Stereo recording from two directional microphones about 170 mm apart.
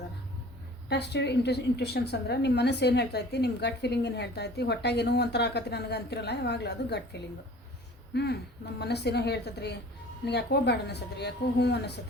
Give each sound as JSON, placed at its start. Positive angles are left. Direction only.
{"t": 0.9, "sound": "a woman's voice", "side_deg": 80}